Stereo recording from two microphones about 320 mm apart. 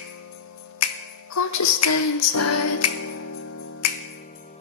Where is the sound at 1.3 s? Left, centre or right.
Left.